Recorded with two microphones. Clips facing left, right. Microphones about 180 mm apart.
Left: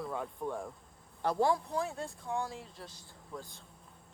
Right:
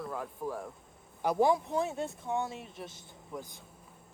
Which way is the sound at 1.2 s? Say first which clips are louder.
Right 3 dB; 20° right (ahead or behind).